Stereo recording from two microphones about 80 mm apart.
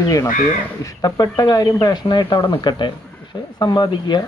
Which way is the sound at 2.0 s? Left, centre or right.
Left.